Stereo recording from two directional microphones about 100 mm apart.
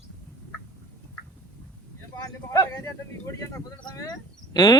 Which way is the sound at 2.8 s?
30° left (ahead or behind).